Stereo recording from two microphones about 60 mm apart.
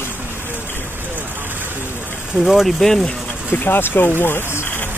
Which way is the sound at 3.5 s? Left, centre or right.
Left.